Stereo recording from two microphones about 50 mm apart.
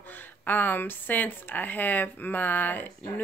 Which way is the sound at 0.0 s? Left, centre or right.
Left.